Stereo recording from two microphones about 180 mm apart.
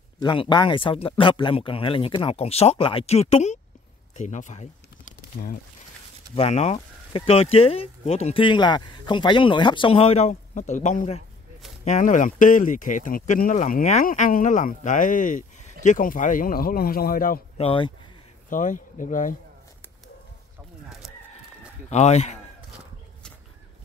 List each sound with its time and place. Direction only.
0.2 s speech: 25° left (ahead or behind)
4.2 s a sound: 40° left (ahead or behind)
6.3 s speech: 35° left (ahead or behind); by 17.4 s 50° left (ahead or behind)
17.6 s speech: 30° left (ahead or behind)
18.5 s speech: 45° left (ahead or behind)
21.8 s speech: 40° left (ahead or behind)